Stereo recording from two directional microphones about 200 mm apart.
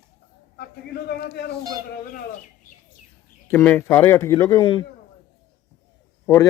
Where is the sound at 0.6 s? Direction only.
55° left (ahead or behind).